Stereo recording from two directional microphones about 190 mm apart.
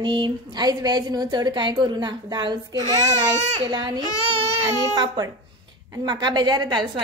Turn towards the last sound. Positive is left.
turn(degrees=-25)  # may be behind; listen again after turning